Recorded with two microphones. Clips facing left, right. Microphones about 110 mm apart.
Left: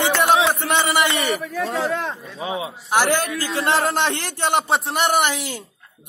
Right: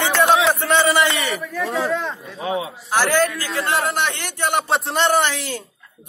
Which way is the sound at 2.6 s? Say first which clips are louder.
Left 5 dB; 20° left (ahead or behind).